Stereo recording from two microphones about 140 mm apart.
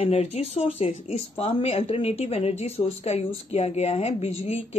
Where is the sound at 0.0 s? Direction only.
50° left (ahead or behind).